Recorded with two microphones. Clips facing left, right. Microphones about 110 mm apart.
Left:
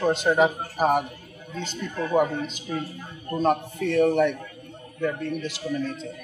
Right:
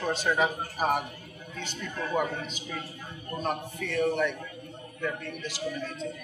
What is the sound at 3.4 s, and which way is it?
Speech, 35° left (ahead or behind).